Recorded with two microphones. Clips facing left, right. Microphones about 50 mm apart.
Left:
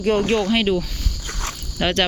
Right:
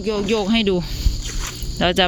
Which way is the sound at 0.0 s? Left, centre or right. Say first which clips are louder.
Left 2 dB; left.